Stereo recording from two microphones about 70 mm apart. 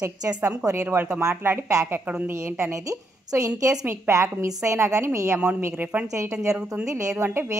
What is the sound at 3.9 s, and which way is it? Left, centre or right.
Speech, right.